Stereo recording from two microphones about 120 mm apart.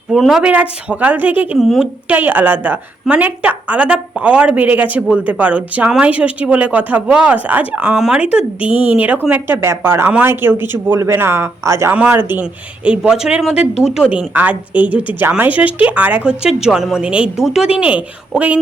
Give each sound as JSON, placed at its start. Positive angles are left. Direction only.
{"t": 0.1, "sound": "a woman's voice", "side_deg": 0}
{"t": 1.5, "sound": "speech", "side_deg": 0}
{"t": 2.0, "sound": "a woman's voice", "side_deg": -15}